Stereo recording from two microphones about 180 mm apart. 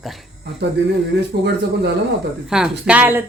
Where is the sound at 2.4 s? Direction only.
5° right (ahead or behind).